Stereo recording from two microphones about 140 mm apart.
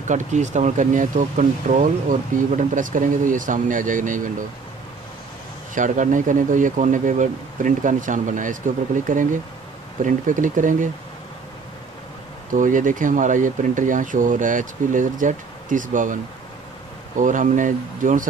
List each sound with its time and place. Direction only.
0.1 s speech: 60° right (ahead or behind)
5.8 s speech: 65° right (ahead or behind)
12.4 s speech: 70° right (ahead or behind)
17.2 s speech: 70° right (ahead or behind)